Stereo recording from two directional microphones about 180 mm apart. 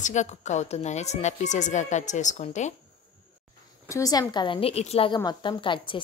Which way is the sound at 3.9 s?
20° left (ahead or behind).